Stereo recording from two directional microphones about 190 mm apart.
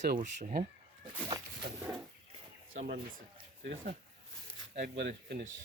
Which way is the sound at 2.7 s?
45° right (ahead or behind).